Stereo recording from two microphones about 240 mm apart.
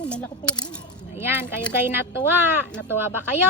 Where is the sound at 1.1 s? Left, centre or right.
Centre.